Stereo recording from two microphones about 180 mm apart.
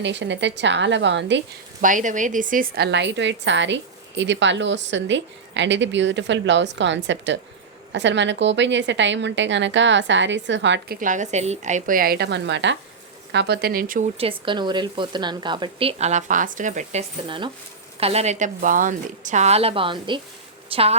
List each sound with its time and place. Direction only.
0.0 s a woman's voice: 80° right
1.8 s a woman's voice: 45° right (ahead or behind); by 10.9 s 90° right
11.0 s speech: 45° right (ahead or behind); by 12.7 s 80° right
13.3 s a woman's voice: 65° right (ahead or behind); by 14.1 s 50° right (ahead or behind)
14.2 s a woman's voice: 30° right (ahead or behind)